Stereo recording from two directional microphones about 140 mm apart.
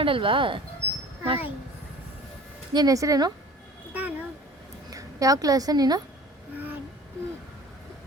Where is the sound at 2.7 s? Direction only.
25° right (ahead or behind).